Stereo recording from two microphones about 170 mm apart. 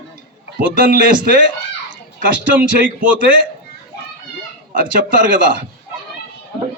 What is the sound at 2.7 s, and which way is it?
Speech, 50° right (ahead or behind).